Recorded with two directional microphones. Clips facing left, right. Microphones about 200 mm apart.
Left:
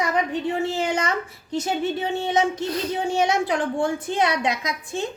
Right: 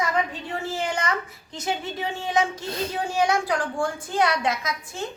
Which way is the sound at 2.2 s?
25° left (ahead or behind).